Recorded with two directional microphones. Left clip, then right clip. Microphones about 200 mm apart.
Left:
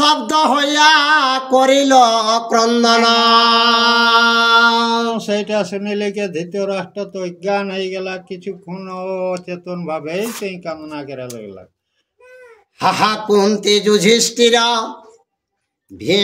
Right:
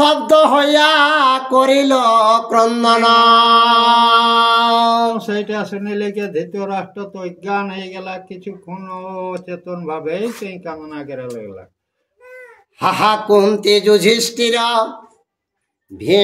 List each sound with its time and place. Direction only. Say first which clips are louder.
0.0 s music: right 3 dB; centre (ahead or behind)
5.1 s speech: left 2 dB; 15° left (ahead or behind)
12.8 s a sound: right 1 dB; 5° left (ahead or behind)